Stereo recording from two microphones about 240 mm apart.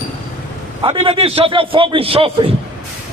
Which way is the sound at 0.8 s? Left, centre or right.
Right.